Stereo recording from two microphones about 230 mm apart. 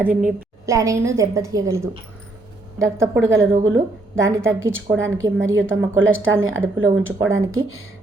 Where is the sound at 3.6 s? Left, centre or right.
Right.